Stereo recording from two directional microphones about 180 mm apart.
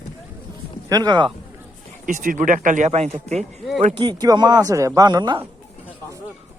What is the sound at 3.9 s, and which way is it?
Speech, 25° right (ahead or behind).